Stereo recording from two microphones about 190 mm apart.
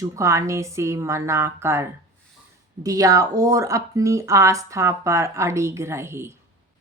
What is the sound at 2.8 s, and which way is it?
Speech, 20° right (ahead or behind).